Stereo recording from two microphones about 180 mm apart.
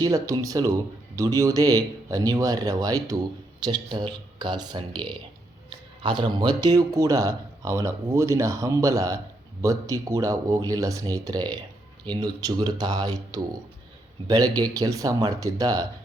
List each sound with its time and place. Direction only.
0.0 s speech: 20° right (ahead or behind)